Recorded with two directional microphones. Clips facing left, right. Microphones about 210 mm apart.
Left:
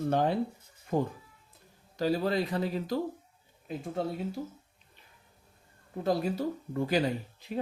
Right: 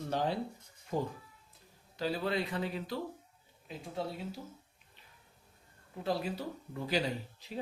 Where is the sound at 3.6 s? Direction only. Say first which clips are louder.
Left 6 dB; 50° left (ahead or behind).